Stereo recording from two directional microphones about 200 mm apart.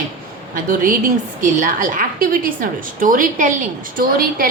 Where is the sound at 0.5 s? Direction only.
40° right (ahead or behind).